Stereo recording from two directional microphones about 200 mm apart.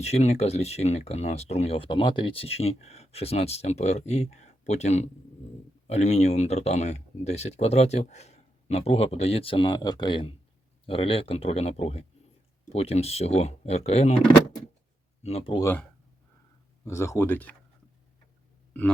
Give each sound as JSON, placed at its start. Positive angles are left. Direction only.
{"t": 0.0, "sound": "speech", "side_deg": 35}
{"t": 15.2, "sound": "speech", "side_deg": 30}
{"t": 15.6, "sound": "speech", "side_deg": 10}